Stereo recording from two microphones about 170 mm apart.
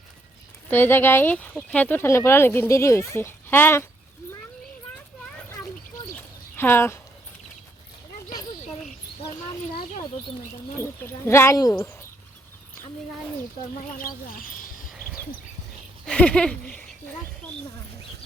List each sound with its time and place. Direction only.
0.7 s speech: 10° left (ahead or behind)
6.1 s a sound: 10° left (ahead or behind)
10.8 s speech: 15° left (ahead or behind)
14.0 s speech: 55° left (ahead or behind)
16.0 s speech: 5° left (ahead or behind)